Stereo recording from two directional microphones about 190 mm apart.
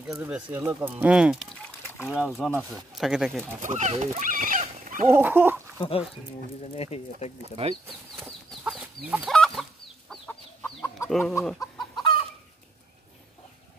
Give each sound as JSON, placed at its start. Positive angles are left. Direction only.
{"t": 0.0, "sound": "speech", "side_deg": -5}
{"t": 3.6, "sound": "a sound", "side_deg": -40}
{"t": 5.1, "sound": "dog", "side_deg": -10}
{"t": 5.8, "sound": "speech", "side_deg": 30}
{"t": 8.5, "sound": "chicken", "side_deg": -5}
{"t": 11.9, "sound": "chicken", "side_deg": 25}